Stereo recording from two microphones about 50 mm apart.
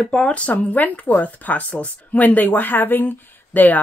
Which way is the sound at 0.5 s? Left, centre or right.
Left.